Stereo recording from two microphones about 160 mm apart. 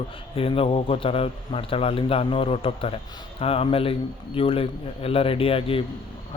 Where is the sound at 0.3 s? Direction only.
35° left (ahead or behind).